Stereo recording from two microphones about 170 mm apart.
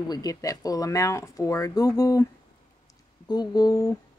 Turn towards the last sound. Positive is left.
turn(degrees=20)  # may be behind; listen again after turning